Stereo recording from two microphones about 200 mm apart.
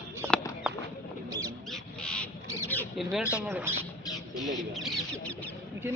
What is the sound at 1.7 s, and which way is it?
Crow, 5° left (ahead or behind).